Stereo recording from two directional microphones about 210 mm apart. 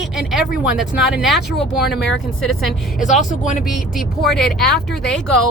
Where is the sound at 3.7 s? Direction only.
Centre (ahead or behind).